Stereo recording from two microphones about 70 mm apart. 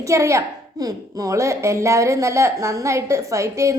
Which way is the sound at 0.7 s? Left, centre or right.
Right.